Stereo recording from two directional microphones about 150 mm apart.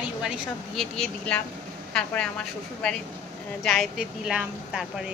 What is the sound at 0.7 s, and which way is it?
A woman's voice, 5° left (ahead or behind).